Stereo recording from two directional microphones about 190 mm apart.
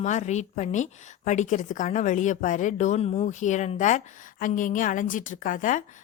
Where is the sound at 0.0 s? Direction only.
35° left (ahead or behind).